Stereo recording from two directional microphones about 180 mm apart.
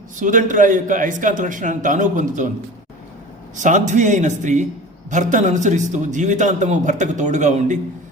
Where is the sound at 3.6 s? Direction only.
45° right (ahead or behind).